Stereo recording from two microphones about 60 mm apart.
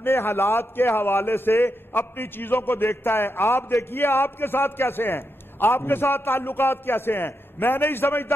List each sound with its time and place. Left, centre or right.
0.0 s a man's voice: left